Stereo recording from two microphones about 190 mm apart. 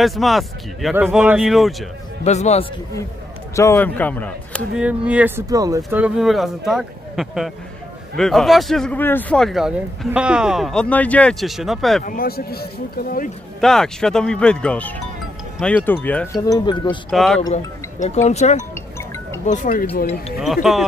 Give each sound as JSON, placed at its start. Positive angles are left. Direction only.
{"t": 0.0, "sound": "speech", "side_deg": 0}
{"t": 2.2, "sound": "speech", "side_deg": 35}
{"t": 3.5, "sound": "speech", "side_deg": 15}
{"t": 4.7, "sound": "speech", "side_deg": -5}
{"t": 5.9, "sound": "speech", "side_deg": -5}
{"t": 12.0, "sound": "speech", "side_deg": 50}
{"t": 13.6, "sound": "speech", "side_deg": 0}
{"t": 16.4, "sound": "speech", "side_deg": 20}
{"t": 17.1, "sound": "speech", "side_deg": 0}
{"t": 17.5, "sound": "speech", "side_deg": 40}
{"t": 18.6, "sound": "music", "side_deg": 15}
{"t": 19.4, "sound": "speech", "side_deg": 40}
{"t": 20.3, "sound": "speech", "side_deg": 0}